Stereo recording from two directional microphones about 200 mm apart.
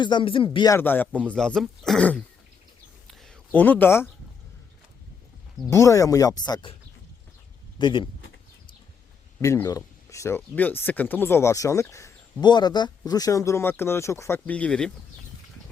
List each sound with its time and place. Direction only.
0.0 s speech: 25° left (ahead or behind); by 2.2 s 5° left (ahead or behind)
3.1 s a sound: centre (ahead or behind)
5.7 s speech: 15° left (ahead or behind)
7.8 s speech: 25° left (ahead or behind)
9.4 s speech: 15° left (ahead or behind)